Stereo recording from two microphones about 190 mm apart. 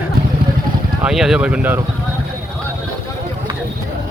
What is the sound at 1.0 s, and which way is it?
Speech, centre (ahead or behind).